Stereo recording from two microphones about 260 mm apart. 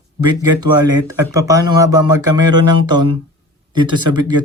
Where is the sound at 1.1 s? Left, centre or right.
Centre.